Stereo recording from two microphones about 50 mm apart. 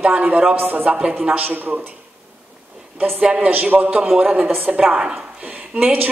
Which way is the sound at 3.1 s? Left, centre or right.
Right.